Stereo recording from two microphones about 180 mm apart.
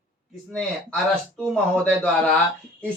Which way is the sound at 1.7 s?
5° left (ahead or behind).